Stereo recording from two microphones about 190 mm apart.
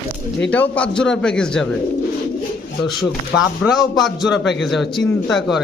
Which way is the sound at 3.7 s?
Centre (ahead or behind).